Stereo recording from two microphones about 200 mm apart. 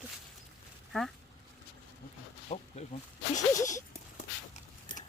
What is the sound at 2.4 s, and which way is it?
Wild animals, 35° left (ahead or behind).